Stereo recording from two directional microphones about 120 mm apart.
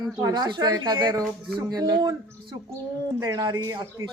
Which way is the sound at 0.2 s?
35° right (ahead or behind).